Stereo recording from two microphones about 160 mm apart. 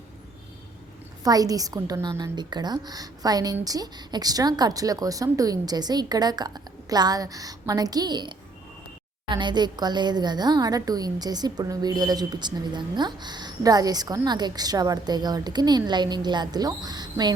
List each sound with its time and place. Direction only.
1.2 s a woman's voice: 25° right (ahead or behind)